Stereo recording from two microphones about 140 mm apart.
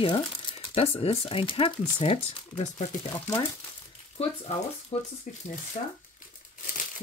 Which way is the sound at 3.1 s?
30° left (ahead or behind).